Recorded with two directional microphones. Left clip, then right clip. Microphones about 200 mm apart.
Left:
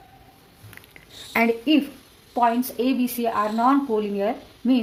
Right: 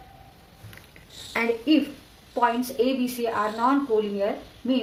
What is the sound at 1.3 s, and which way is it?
A woman's voice, 50° left (ahead or behind).